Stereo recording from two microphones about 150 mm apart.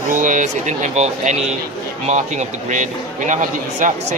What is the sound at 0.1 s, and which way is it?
Speech, 60° right (ahead or behind).